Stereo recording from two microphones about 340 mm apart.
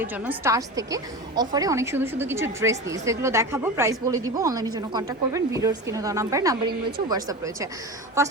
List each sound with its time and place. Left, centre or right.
0.0 s a woman's voice: centre